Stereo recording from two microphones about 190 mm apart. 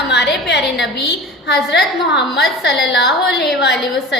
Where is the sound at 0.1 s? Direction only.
65° left (ahead or behind).